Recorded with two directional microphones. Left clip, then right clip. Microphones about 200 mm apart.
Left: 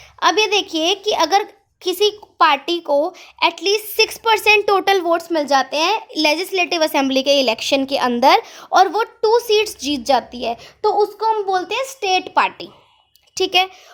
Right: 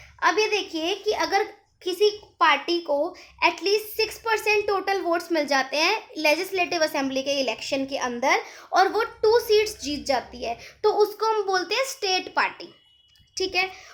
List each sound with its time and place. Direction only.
0.2 s a woman's voice: 35° left (ahead or behind)
6.1 s a woman's voice: 40° left (ahead or behind)
10.8 s a child's voice: 10° left (ahead or behind); by 13.7 s 40° left (ahead or behind)